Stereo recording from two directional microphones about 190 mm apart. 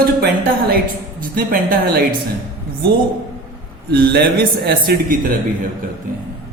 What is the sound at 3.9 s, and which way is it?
A man's voice, 55° right (ahead or behind).